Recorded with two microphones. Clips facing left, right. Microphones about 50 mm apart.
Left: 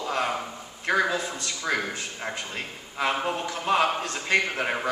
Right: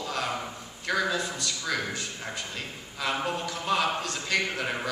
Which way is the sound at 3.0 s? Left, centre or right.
Left.